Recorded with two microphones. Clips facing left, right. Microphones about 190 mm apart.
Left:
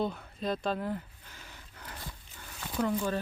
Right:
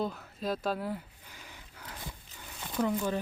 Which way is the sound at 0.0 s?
Centre (ahead or behind).